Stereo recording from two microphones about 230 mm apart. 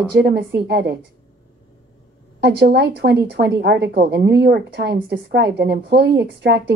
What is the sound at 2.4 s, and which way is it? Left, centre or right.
A woman's voice, right.